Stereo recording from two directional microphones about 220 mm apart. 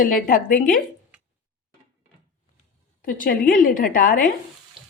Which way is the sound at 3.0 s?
40° left (ahead or behind).